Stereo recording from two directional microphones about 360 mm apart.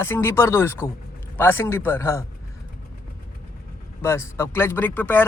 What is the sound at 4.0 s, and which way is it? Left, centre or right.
Speech, centre.